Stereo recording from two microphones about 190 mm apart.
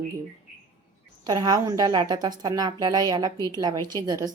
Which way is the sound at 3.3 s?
15° left (ahead or behind).